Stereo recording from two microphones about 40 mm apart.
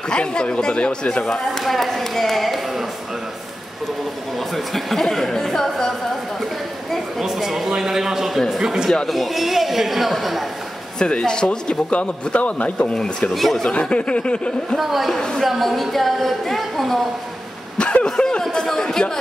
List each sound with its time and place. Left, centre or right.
0.1 s speech: left
1.2 s speech: centre
1.6 s a woman's voice: centre
4.6 s speech: centre
7.2 s a man's voice: centre
9.0 s a woman's voice: centre
11.0 s speech: left
13.3 s a woman's voice: centre
13.7 s speech: left
14.8 s a woman's voice: centre
17.7 s a sound: left
18.7 s speech: centre